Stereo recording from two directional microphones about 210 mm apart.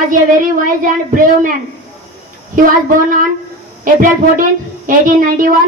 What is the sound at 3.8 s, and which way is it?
Speech, 40° right (ahead or behind).